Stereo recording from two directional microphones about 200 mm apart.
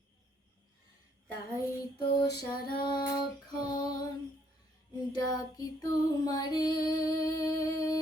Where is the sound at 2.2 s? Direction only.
50° left (ahead or behind).